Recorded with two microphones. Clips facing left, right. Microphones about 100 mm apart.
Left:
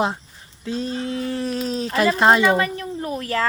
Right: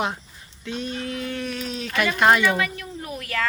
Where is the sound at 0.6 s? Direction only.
30° left (ahead or behind).